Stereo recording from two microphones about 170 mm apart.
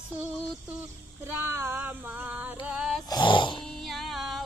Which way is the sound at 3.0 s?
25° left (ahead or behind).